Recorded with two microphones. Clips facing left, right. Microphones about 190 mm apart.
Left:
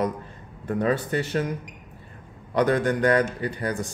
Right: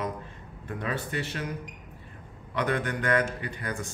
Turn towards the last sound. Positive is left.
turn(degrees=35)  # may be behind; listen again after turning